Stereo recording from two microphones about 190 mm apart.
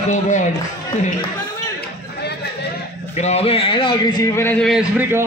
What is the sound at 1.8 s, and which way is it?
Chatter, 60° left (ahead or behind).